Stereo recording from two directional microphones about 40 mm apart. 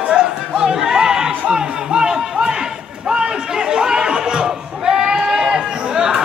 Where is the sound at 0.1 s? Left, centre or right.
Centre.